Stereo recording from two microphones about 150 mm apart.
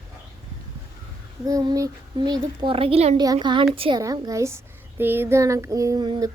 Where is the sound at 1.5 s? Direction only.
25° right (ahead or behind); by 3.2 s 45° right (ahead or behind).